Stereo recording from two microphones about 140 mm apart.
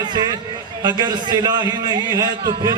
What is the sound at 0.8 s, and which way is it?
Speech, 30° right (ahead or behind).